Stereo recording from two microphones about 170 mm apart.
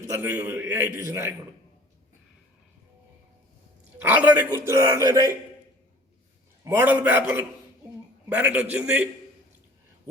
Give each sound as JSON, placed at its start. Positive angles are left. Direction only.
{"t": 0.1, "sound": "a man's voice", "side_deg": -10}
{"t": 3.9, "sound": "a man's voice", "side_deg": -10}
{"t": 6.7, "sound": "a man's voice", "side_deg": -10}